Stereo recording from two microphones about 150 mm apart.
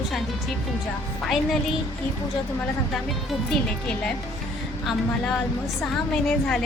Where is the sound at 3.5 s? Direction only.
5° left (ahead or behind).